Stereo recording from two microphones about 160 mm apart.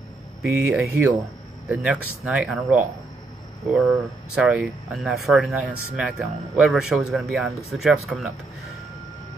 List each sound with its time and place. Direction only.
0.5 s speech: 15° right (ahead or behind)